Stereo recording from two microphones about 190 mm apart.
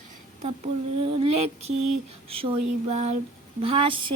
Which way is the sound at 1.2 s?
35° right (ahead or behind).